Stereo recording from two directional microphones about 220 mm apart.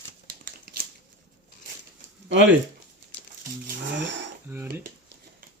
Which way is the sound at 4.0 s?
55° right (ahead or behind).